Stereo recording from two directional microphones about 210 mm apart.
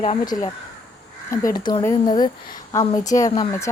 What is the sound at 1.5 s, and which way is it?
A woman's voice, 20° left (ahead or behind).